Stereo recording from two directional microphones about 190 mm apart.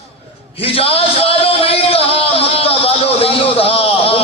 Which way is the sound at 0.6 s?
30° left (ahead or behind).